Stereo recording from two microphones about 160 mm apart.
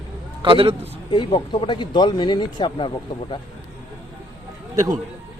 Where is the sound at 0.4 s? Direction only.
35° right (ahead or behind).